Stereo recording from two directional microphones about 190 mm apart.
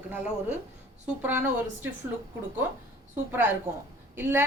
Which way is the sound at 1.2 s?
10° right (ahead or behind).